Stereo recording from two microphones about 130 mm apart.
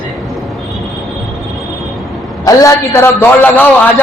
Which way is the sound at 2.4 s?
25° left (ahead or behind).